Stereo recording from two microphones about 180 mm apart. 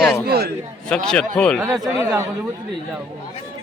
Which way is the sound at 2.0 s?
15° right (ahead or behind).